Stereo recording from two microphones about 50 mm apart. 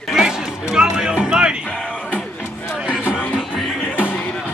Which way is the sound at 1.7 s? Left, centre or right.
Left.